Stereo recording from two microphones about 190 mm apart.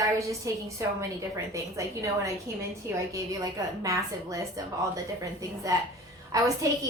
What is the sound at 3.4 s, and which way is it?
A woman's voice, 15° right (ahead or behind).